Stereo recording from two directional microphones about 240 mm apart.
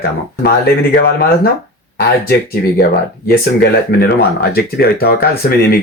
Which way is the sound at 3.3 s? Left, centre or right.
Left.